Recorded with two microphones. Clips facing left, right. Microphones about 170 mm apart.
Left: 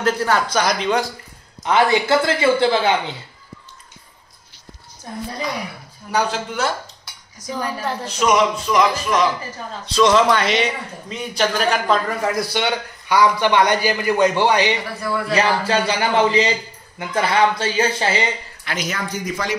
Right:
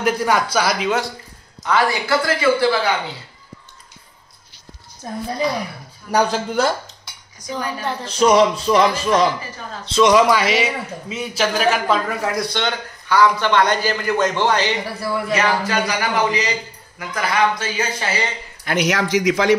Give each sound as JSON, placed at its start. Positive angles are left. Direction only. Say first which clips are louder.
{"t": 0.0, "sound": "speech", "louder": "right 1 dB", "side_deg": -10}
{"t": 1.6, "sound": "a man's voice", "louder": "left 2 dB", "side_deg": 25}
{"t": 6.1, "sound": "speech", "louder": "right 3 dB", "side_deg": -40}
{"t": 7.4, "sound": "a woman's voice", "louder": "even", "side_deg": 5}
{"t": 8.2, "sound": "a man's voice", "louder": "right 4 dB", "side_deg": -30}
{"t": 10.1, "sound": "a man's voice", "louder": "right 1 dB", "side_deg": -5}
{"t": 15.0, "sound": "a man's voice", "louder": "even", "side_deg": -20}
{"t": 15.3, "sound": "a man's voice", "louder": "left 2 dB", "side_deg": 30}
{"t": 18.8, "sound": "speech", "louder": "right 9 dB", "side_deg": -85}